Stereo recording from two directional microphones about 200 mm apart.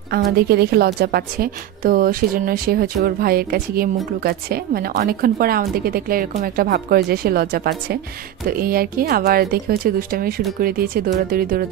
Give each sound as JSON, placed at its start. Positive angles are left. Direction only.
{"t": 0.1, "sound": "a woman's voice", "side_deg": -50}